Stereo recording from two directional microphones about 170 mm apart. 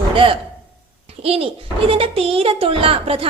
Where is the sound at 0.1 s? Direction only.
30° right (ahead or behind).